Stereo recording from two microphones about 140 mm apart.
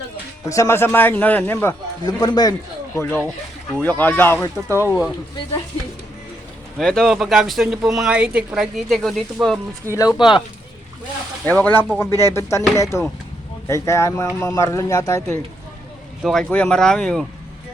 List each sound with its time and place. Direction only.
0.4 s speech: 20° left (ahead or behind)
1.6 s speech: 30° left (ahead or behind)
3.0 s speech: 15° left (ahead or behind)
6.7 s speech: 5° left (ahead or behind)
10.2 s speech: 35° left (ahead or behind)
11.4 s speech: 15° left (ahead or behind)
16.2 s speech: centre (ahead or behind)